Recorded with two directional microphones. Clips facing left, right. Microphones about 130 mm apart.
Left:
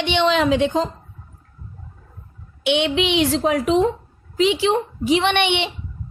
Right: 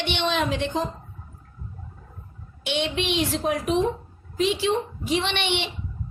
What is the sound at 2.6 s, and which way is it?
A woman's voice, 80° left.